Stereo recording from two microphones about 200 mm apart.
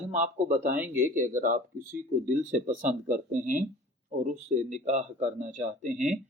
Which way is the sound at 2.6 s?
35° right (ahead or behind).